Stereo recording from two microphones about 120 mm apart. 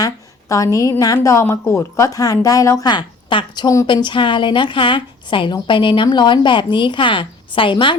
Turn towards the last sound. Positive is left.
turn(degrees=45)  # may be behind; listen again after turning